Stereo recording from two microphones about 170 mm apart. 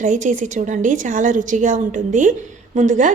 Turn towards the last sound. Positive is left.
turn(degrees=-45)  # may be behind; listen again after turning